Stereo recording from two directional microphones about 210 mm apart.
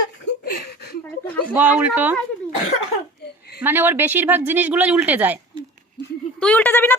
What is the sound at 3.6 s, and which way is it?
Speech, 10° right (ahead or behind).